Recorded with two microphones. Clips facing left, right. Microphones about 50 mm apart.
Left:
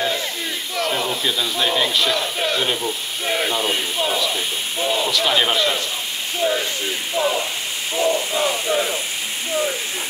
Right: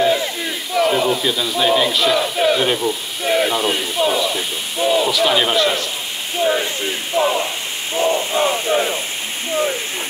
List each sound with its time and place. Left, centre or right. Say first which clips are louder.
0.0 s battle cry: right 6 dB; centre
0.7 s a man's voice: right 7 dB; centre
7.2 s speech: right 4 dB; right
8.0 s a sound: right 3 dB; right